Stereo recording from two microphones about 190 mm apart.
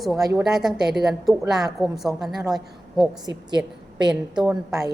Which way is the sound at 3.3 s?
20° right (ahead or behind).